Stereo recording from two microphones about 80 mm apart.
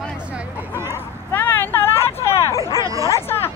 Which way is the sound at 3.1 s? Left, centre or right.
Left.